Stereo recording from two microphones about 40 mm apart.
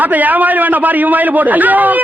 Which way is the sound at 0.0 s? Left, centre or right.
Right.